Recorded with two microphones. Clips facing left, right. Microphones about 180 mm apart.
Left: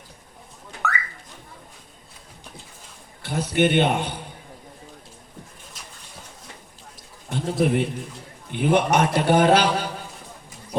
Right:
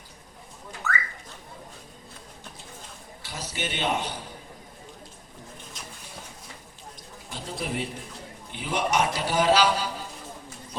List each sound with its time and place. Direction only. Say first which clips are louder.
0.8 s car alarm: left 3 dB; 65° left (ahead or behind)
3.2 s a man's voice: left 14 dB; 55° left (ahead or behind)
7.3 s a sound: left 11 dB; 55° left (ahead or behind)
7.6 s a man's voice: left 10 dB; 55° left (ahead or behind)